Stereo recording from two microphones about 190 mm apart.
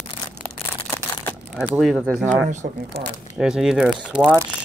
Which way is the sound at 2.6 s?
50° right (ahead or behind).